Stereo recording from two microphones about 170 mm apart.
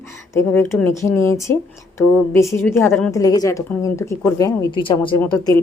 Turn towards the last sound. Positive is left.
turn(degrees=20)  # may be behind; listen again after turning